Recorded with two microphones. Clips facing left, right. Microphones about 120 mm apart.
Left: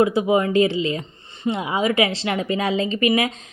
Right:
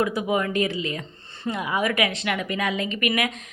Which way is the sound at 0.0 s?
25° left (ahead or behind).